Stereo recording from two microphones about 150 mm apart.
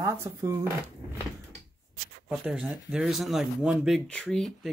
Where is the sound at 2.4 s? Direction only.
5° right (ahead or behind).